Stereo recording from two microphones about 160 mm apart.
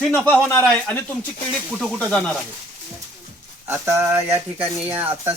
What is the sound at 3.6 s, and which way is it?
Speech, 15° right (ahead or behind).